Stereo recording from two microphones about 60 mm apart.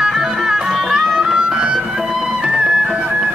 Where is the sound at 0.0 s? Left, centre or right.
Centre.